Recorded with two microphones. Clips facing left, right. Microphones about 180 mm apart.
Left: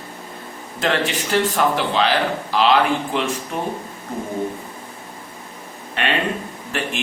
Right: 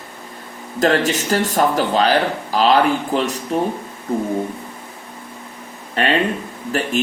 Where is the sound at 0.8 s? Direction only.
40° right (ahead or behind).